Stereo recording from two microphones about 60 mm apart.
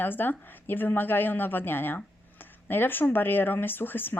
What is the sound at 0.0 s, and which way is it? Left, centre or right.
Speech, left.